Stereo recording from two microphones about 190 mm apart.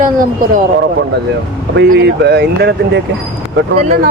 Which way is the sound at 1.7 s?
60° right (ahead or behind).